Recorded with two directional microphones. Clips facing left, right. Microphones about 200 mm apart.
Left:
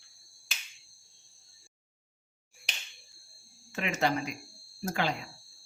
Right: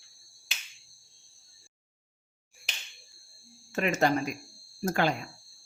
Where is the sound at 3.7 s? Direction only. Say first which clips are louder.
Right 4 dB; 45° right (ahead or behind).